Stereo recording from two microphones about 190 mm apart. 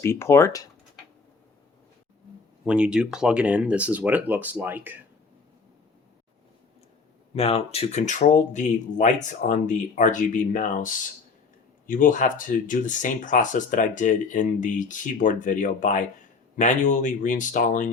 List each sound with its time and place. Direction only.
0.0 s speech: 15° left (ahead or behind)
2.6 s speech: 5° right (ahead or behind)
7.3 s speech: 30° left (ahead or behind)
11.9 s speech: 45° left (ahead or behind)